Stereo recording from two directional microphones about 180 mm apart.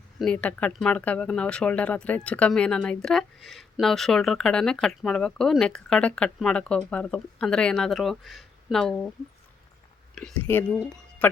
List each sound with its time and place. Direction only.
0.2 s speech: 5° left (ahead or behind)
10.2 s speech: 5° left (ahead or behind)